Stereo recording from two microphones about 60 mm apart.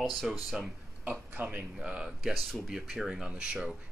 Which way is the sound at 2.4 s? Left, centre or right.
Centre.